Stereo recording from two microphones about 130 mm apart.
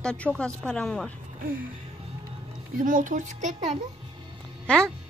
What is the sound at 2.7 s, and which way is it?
Speech, 90° right.